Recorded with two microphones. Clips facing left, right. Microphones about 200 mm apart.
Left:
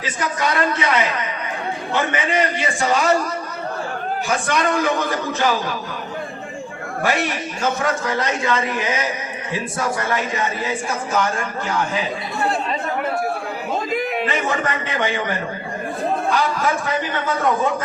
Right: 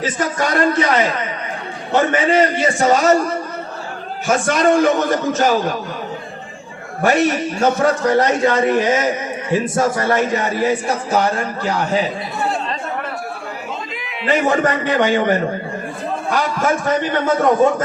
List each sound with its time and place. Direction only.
0.0 s a man's voice: 45° right (ahead or behind)
4.3 s a man's voice: 45° right (ahead or behind)
7.0 s a man's voice: 45° right (ahead or behind)
13.9 s a sound: 45° left (ahead or behind)
14.3 s a man's voice: 35° right (ahead or behind)